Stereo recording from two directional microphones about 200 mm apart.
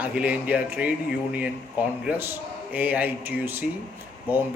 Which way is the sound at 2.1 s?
10° right (ahead or behind).